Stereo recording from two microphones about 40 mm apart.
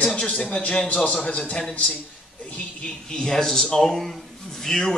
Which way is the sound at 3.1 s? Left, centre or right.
Centre.